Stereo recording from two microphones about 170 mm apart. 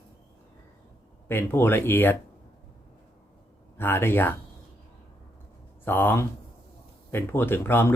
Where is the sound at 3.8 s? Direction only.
10° left (ahead or behind).